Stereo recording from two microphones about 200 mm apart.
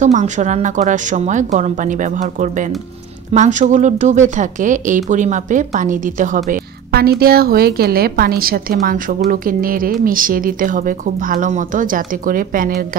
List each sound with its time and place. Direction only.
0.0 s speech: 35° right (ahead or behind)